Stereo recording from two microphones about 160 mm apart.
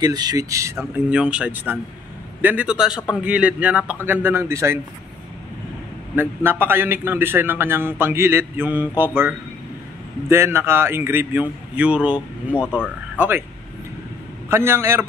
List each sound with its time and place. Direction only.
0.0 s a man's voice: 25° right (ahead or behind)
6.1 s a man's voice: 15° right (ahead or behind)
10.3 s a man's voice: 15° right (ahead or behind)
12.7 s speech: 10° left (ahead or behind)
14.5 s a man's voice: 15° right (ahead or behind)